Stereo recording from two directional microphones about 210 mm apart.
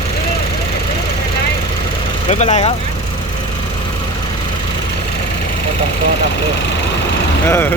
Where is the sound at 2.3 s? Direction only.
30° left (ahead or behind).